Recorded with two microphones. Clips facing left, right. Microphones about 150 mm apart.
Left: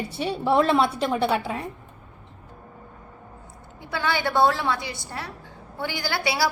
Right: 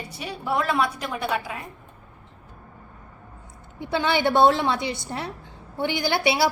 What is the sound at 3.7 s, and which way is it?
A woman's voice, 20° right (ahead or behind).